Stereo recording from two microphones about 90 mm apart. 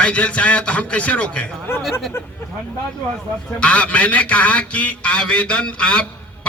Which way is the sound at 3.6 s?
15° left (ahead or behind).